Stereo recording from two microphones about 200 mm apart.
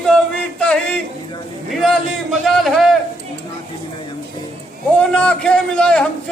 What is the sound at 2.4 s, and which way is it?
Speech, centre (ahead or behind).